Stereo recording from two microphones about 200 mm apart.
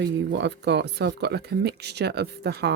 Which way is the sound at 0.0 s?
60° right (ahead or behind).